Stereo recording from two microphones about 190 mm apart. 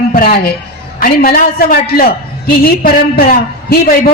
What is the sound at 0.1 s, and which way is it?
A woman's voice, 50° left (ahead or behind).